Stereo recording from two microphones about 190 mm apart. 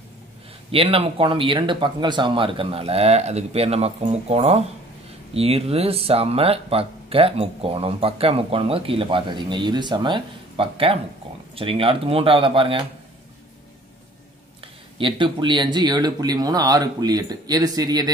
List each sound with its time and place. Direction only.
0.7 s speech: 30° right (ahead or behind)
15.0 s speech: 25° right (ahead or behind)